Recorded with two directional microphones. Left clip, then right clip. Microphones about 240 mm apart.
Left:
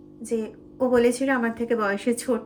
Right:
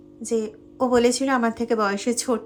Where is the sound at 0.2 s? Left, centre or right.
Right.